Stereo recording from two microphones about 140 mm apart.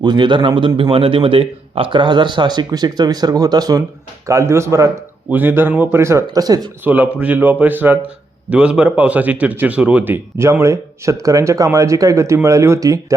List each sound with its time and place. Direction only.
0.0 s a man's voice: 30° right (ahead or behind)
6.8 s speech: 10° right (ahead or behind)